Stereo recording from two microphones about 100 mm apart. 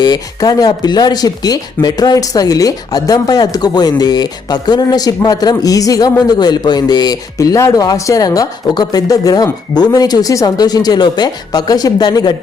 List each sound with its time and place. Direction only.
0.0 s speech: 40° left (ahead or behind)